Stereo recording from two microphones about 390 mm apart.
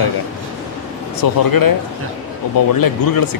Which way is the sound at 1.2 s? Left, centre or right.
Left.